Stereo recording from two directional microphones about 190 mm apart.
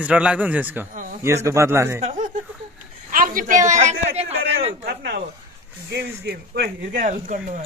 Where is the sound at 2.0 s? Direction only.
40° right (ahead or behind).